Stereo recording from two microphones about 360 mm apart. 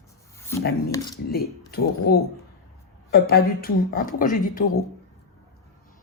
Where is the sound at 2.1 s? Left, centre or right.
Left.